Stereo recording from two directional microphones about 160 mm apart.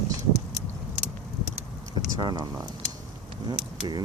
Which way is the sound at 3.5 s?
30° right (ahead or behind).